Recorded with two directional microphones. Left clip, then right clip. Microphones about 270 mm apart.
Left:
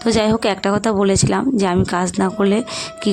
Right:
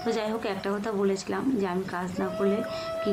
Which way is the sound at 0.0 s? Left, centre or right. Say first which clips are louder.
Left 12 dB; left.